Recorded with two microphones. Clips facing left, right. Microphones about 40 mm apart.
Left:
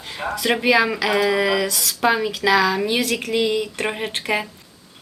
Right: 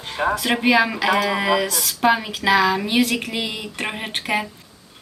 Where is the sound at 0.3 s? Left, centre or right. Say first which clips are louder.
Left 2 dB; centre.